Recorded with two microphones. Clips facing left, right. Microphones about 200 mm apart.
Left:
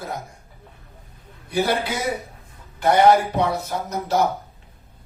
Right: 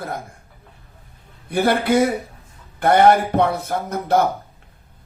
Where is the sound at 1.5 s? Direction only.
55° right (ahead or behind).